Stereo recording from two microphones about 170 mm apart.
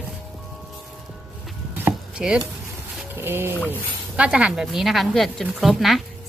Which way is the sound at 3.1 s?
15° right (ahead or behind).